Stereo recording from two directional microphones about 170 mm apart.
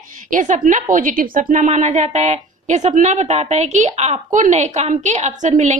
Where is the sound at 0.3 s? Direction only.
50° right (ahead or behind).